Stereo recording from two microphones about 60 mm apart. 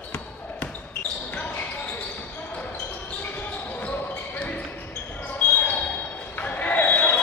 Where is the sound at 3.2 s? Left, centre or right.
Left.